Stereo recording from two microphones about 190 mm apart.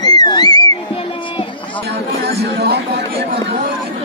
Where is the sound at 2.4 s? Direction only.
60° right (ahead or behind).